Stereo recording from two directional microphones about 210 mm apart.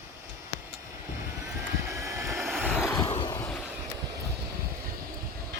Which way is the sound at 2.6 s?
Centre (ahead or behind).